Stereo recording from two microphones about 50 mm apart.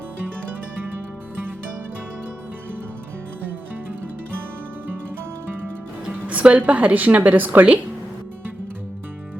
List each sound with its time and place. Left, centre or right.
6.2 s music: right
6.7 s a woman's voice: right